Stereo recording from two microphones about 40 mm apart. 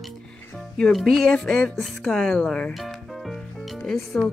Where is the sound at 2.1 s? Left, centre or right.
Centre.